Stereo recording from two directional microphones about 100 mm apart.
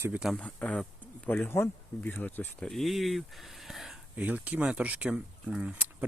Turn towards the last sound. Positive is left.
turn(degrees=-10)  # may be behind; listen again after turning